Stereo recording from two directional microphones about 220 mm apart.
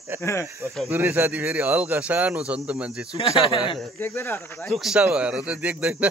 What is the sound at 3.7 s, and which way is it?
Speech, 10° left (ahead or behind).